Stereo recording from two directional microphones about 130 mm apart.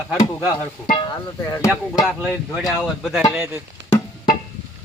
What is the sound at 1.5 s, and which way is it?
Speech, 25° left (ahead or behind).